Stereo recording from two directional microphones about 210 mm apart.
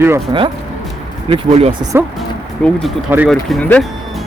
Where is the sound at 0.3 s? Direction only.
20° right (ahead or behind).